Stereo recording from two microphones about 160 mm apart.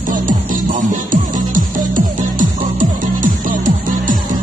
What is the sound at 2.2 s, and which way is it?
Music, 55° right (ahead or behind).